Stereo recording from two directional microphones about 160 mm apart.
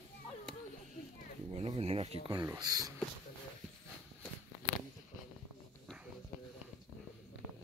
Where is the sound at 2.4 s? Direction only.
25° right (ahead or behind).